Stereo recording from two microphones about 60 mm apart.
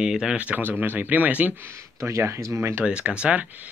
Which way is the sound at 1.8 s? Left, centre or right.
Right.